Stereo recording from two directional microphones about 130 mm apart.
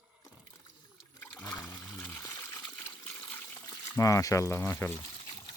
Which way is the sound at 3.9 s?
25° left (ahead or behind).